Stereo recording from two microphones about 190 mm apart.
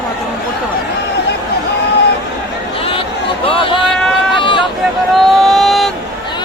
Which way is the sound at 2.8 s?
30° left (ahead or behind).